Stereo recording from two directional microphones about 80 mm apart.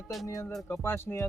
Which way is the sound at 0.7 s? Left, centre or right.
Left.